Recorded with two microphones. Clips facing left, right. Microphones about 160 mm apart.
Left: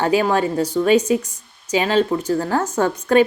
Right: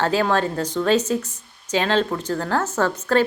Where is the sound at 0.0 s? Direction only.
10° left (ahead or behind).